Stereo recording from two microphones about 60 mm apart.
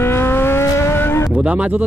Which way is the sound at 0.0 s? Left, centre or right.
Left.